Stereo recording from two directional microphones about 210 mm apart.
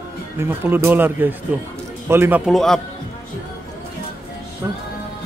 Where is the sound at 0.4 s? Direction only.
10° right (ahead or behind).